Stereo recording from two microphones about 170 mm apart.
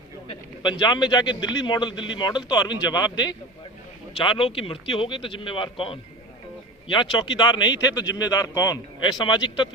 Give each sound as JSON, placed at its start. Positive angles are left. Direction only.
{"t": 0.3, "sound": "a man's voice", "side_deg": 25}